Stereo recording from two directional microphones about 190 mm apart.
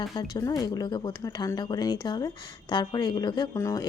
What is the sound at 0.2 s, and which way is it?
Speech, 20° left (ahead or behind).